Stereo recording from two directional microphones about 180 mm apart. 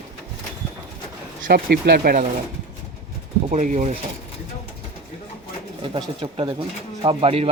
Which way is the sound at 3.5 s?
45° right (ahead or behind).